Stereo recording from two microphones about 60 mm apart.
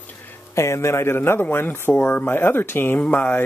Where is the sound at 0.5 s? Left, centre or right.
Left.